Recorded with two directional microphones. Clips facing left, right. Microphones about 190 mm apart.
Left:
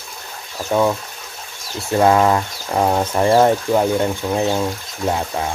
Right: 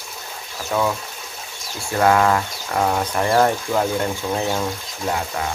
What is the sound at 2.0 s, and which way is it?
Speech, 20° left (ahead or behind).